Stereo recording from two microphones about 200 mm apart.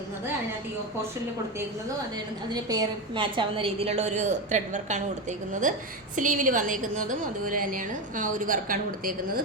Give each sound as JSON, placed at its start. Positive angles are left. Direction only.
{"t": 2.5, "sound": "a woman's voice", "side_deg": -20}
{"t": 6.1, "sound": "a woman's voice", "side_deg": -40}